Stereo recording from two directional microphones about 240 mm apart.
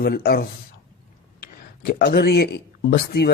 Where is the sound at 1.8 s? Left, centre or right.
Left.